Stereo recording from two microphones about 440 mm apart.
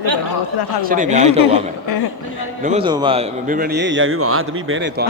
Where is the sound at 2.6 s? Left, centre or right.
Centre.